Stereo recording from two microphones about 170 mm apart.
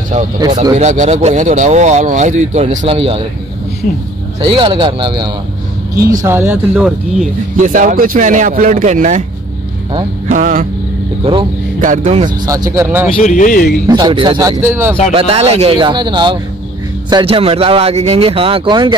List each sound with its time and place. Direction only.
0.7 s speech: 45° right (ahead or behind)
4.4 s speech: 30° right (ahead or behind)
5.9 s speech: 55° right (ahead or behind)
6.2 s speech: 15° right (ahead or behind)
7.5 s speech: 50° right (ahead or behind)
10.3 s speech: 50° right (ahead or behind)
12.0 s speech: 35° right (ahead or behind)
12.4 s speech: 20° right (ahead or behind)
13.1 s speech: 45° left (ahead or behind)
13.8 s speech: 25° right (ahead or behind)
15.1 s speech: 35° right (ahead or behind)